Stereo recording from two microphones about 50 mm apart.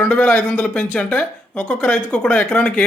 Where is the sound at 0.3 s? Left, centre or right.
Left.